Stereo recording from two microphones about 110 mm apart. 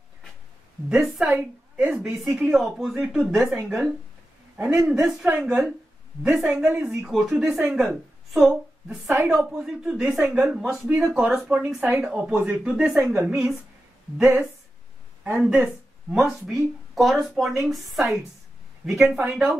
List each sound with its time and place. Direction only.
0.8 s a woman's voice: 5° right (ahead or behind)
12.9 s a woman's voice: 20° right (ahead or behind)
14.1 s a woman's voice: 5° right (ahead or behind)